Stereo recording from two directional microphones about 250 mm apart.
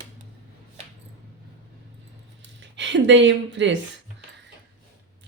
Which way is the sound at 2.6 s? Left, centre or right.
Right.